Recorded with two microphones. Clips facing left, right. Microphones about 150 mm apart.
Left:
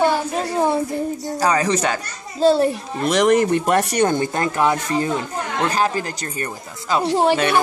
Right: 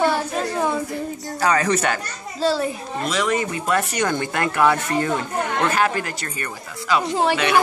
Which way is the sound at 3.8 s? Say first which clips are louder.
Left 5 dB; 30° left (ahead or behind).